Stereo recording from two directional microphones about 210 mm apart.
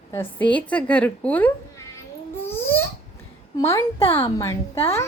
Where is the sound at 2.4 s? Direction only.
10° left (ahead or behind).